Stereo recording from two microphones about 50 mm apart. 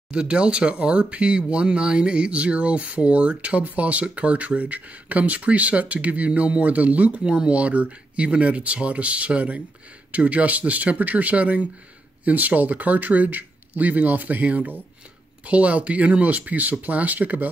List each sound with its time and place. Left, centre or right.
0.1 s speech: right